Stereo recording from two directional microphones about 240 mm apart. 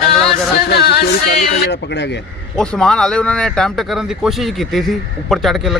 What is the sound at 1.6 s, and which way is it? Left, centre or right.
Speech, left.